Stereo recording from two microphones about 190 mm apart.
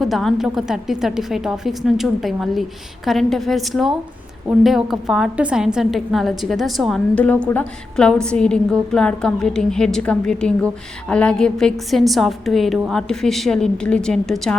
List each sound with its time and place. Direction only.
0.0 s a woman's voice: centre (ahead or behind)